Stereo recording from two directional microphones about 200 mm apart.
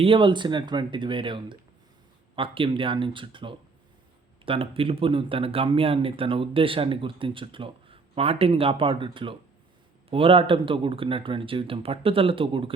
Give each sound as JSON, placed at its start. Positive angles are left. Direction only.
{"t": 0.0, "sound": "speech", "side_deg": -25}